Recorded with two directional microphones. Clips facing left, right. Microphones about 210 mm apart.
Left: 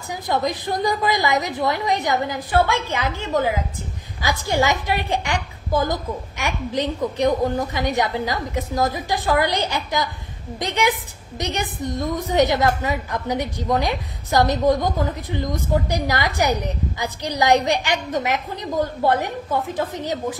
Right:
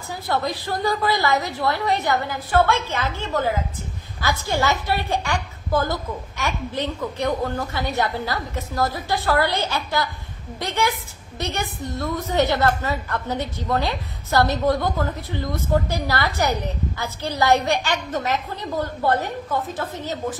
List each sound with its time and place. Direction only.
0.1 s a woman's voice: 15° left (ahead or behind)